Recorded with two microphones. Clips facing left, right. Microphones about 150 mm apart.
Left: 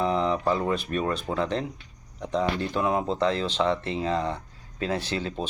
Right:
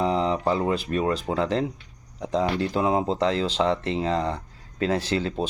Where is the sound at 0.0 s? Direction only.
30° right (ahead or behind).